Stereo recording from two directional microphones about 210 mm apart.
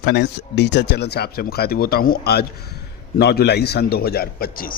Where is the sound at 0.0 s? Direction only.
55° left (ahead or behind).